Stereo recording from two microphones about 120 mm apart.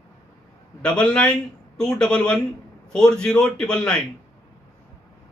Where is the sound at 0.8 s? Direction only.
10° left (ahead or behind).